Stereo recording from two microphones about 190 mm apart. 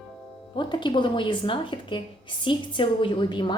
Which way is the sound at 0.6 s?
25° left (ahead or behind).